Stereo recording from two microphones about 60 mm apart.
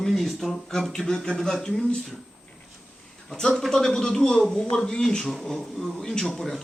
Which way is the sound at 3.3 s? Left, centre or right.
Centre.